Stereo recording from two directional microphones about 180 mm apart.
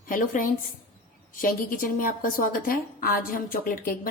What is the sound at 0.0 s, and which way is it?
A woman's voice, 50° left (ahead or behind).